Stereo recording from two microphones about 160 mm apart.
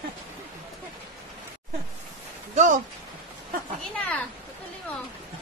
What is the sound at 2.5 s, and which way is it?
Speech, 50° right (ahead or behind).